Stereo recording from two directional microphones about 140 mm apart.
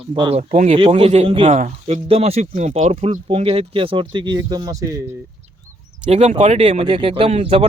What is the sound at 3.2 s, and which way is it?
Speech, 45° right (ahead or behind).